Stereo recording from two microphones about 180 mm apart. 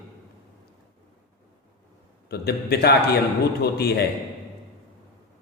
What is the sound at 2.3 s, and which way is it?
A man's voice, 60° left (ahead or behind).